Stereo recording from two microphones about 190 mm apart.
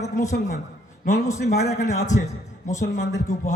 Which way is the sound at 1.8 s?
40° left (ahead or behind).